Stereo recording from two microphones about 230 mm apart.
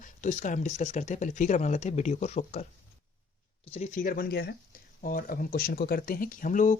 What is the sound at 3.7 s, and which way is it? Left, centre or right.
Speech, left.